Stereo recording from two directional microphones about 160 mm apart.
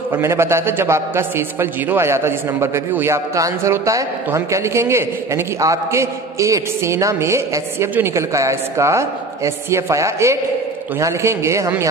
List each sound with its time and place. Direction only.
0.1 s a man's voice: 15° right (ahead or behind)